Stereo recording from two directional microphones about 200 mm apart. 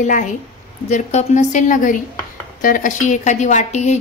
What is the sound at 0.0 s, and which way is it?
A woman's voice, 40° left (ahead or behind).